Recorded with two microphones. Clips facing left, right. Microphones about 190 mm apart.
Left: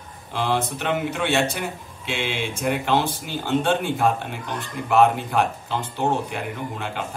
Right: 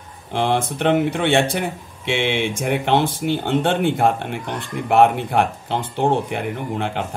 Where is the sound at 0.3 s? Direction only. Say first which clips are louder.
Right 4 dB; 55° right (ahead or behind).